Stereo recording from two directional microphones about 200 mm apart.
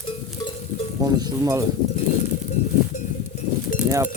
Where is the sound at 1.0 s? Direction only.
20° right (ahead or behind).